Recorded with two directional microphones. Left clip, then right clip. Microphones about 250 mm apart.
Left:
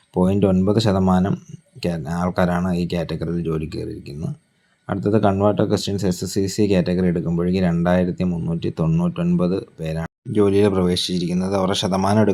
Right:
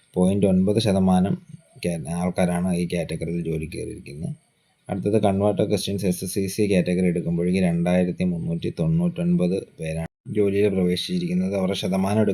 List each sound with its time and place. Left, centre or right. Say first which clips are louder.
0.1 s speech: left 2 dB; centre
5.0 s speech: left 3 dB; centre